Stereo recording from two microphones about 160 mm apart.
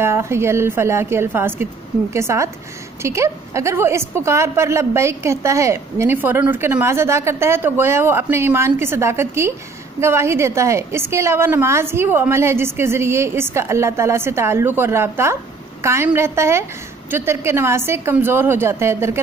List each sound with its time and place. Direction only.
0.0 s a woman's voice: 15° right (ahead or behind)